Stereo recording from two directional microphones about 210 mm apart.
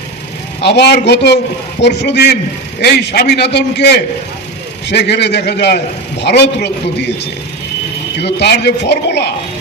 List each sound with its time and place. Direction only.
0.6 s a man's voice: 55° left (ahead or behind)
8.2 s a man's voice: 55° left (ahead or behind)